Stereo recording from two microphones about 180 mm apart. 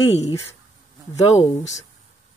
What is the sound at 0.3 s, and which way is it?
Speech, 15° left (ahead or behind).